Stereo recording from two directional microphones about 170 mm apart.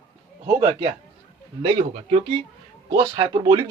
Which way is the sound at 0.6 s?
35° right (ahead or behind).